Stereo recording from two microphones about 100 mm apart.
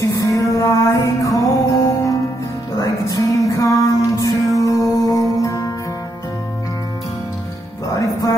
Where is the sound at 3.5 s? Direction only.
35° left (ahead or behind).